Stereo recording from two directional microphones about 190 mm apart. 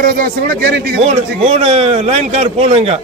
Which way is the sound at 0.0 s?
50° right (ahead or behind).